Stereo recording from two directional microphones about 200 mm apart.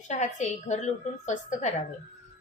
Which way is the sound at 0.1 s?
35° left (ahead or behind).